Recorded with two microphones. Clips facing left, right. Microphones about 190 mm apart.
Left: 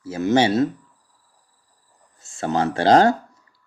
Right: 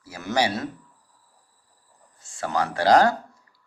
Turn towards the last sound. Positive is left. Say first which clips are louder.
# left 3 dB
turn(degrees=25)  # may be behind; listen again after turning